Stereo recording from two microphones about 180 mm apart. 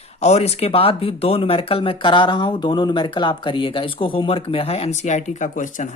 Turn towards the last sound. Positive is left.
turn(degrees=45)  # may be behind; listen again after turning